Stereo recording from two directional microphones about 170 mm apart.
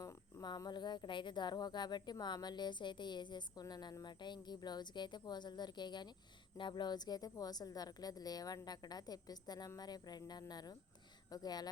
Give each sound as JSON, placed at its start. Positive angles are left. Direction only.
{"t": 0.0, "sound": "speech", "side_deg": 20}